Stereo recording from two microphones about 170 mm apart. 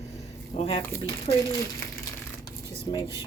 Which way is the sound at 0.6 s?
35° left (ahead or behind).